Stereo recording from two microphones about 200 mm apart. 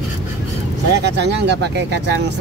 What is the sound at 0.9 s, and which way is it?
Speech, 55° right (ahead or behind).